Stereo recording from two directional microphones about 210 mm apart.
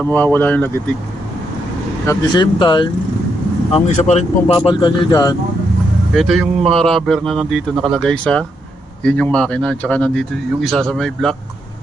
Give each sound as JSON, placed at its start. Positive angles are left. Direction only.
{"t": 0.0, "sound": "speech", "side_deg": 10}
{"t": 2.0, "sound": "speech", "side_deg": 20}
{"t": 3.8, "sound": "speech", "side_deg": 35}
{"t": 6.1, "sound": "speech", "side_deg": 0}